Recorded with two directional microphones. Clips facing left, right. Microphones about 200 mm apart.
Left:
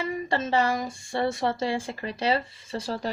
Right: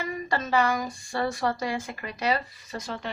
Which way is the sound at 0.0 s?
30° left (ahead or behind).